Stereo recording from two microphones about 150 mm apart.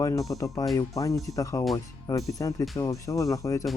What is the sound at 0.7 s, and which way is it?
Speech, 20° left (ahead or behind).